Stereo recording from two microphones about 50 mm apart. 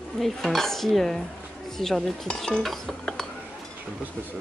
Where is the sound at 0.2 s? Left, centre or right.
Centre.